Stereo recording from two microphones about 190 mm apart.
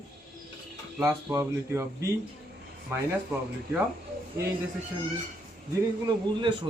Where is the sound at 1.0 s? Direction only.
15° right (ahead or behind).